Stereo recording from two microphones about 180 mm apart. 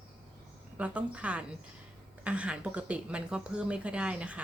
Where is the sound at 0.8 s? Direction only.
5° right (ahead or behind).